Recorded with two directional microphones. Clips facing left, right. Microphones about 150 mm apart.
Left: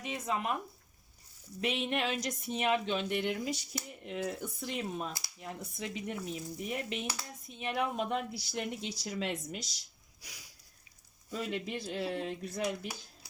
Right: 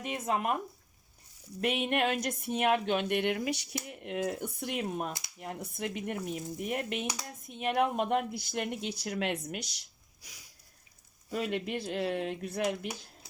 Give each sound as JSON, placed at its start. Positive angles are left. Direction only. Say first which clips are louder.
{"t": 0.0, "sound": "speech", "louder": "right 3 dB", "side_deg": -50}
{"t": 1.6, "sound": "speech", "louder": "right 4 dB", "side_deg": -55}
{"t": 10.2, "sound": "a sound", "louder": "left 3 dB", "side_deg": 80}
{"t": 11.3, "sound": "speech", "louder": "right 4 dB", "side_deg": -60}